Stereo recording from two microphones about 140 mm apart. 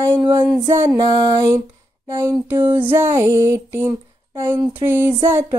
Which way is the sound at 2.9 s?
20° right (ahead or behind).